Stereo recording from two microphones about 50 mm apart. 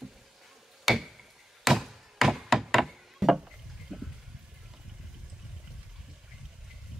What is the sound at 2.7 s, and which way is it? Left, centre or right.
Chop, centre.